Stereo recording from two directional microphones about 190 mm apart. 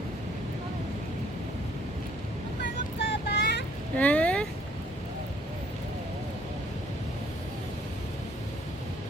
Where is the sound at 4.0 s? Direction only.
5° left (ahead or behind).